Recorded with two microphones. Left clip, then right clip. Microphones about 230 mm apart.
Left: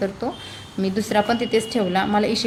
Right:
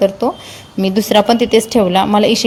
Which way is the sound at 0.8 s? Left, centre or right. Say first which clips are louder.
Right 9 dB; right.